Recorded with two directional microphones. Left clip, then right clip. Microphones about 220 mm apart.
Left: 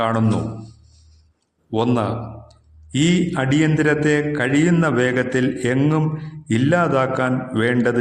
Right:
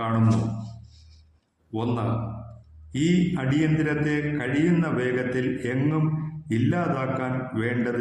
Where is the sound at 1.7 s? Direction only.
45° left (ahead or behind).